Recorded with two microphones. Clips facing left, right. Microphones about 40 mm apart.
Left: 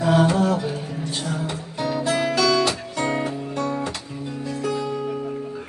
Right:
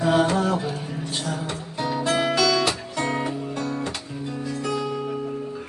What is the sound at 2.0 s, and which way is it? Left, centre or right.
Music, right.